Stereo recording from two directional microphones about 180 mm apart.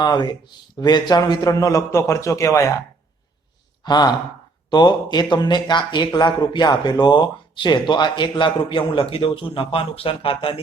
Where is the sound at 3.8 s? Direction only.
25° left (ahead or behind).